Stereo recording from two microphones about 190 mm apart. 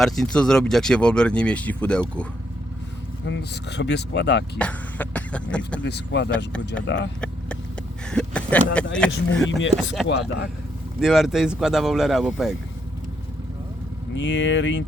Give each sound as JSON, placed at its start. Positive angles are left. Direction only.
{"t": 0.0, "sound": "speech", "side_deg": 5}
{"t": 3.2, "sound": "speech", "side_deg": 65}
{"t": 4.5, "sound": "speech", "side_deg": 5}
{"t": 5.8, "sound": "speech", "side_deg": 65}
{"t": 8.1, "sound": "speech", "side_deg": 5}
{"t": 9.5, "sound": "speech", "side_deg": 75}
{"t": 9.7, "sound": "speech", "side_deg": 0}
{"t": 14.2, "sound": "speech", "side_deg": 70}